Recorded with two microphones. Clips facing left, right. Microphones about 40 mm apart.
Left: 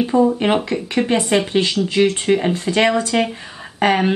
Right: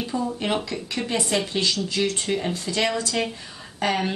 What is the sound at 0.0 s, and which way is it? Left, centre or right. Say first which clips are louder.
Speech: left 11 dB; left.